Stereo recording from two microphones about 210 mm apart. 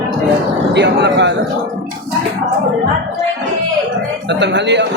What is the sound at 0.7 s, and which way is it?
Speech, 55° right (ahead or behind).